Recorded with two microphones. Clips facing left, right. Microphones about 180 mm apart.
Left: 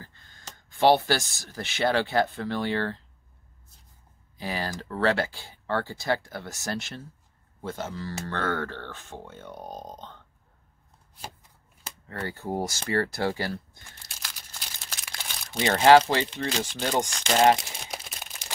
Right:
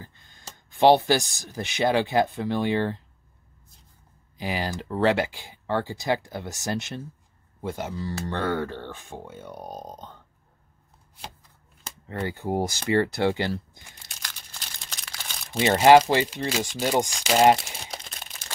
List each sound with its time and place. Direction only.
0.0 s speech: 15° right (ahead or behind)
4.4 s speech: 15° right (ahead or behind)
12.1 s speech: 15° right (ahead or behind)
14.0 s crumpling: 5° left (ahead or behind)
15.1 s speech: centre (ahead or behind)
17.9 s crumpling: 5° left (ahead or behind)